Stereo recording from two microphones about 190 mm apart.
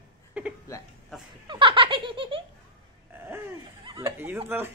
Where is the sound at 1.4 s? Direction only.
25° right (ahead or behind).